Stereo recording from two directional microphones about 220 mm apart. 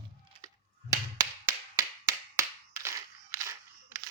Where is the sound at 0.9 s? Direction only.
15° right (ahead or behind).